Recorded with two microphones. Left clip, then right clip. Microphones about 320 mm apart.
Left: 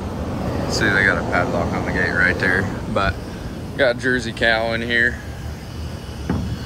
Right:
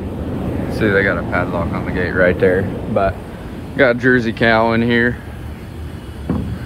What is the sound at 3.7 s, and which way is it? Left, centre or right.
Speech, centre.